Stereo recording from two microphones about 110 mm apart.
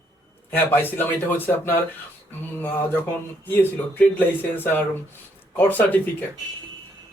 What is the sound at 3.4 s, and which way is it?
Speech, 15° left (ahead or behind).